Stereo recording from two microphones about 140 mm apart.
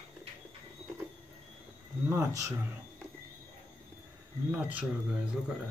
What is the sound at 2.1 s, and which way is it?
Speech, 20° right (ahead or behind).